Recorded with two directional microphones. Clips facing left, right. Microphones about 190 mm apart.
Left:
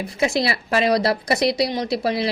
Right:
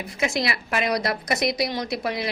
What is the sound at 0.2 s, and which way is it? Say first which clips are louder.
A woman's voice: left 4 dB; 30° left (ahead or behind).